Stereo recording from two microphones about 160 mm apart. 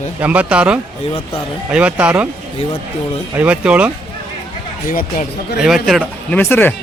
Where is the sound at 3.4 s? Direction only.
10° right (ahead or behind).